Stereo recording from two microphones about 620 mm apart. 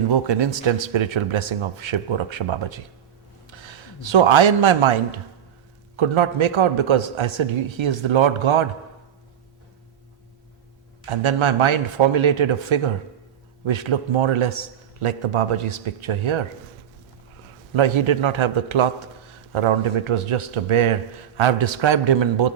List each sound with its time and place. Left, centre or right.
0.1 s a man's voice: right
11.0 s a man's voice: right
17.7 s a man's voice: right